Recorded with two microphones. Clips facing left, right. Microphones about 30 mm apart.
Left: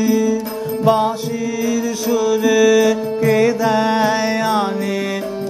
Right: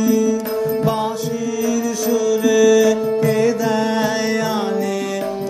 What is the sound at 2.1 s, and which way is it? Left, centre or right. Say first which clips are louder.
Music: left 1 dB; left.